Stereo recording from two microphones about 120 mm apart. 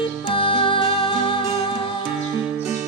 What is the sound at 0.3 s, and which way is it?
Music, 45° left (ahead or behind).